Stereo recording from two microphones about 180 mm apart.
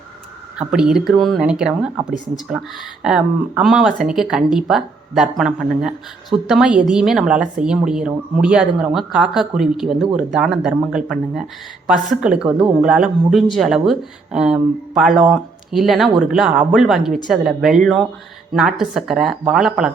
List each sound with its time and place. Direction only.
0.7 s speech: 5° right (ahead or behind)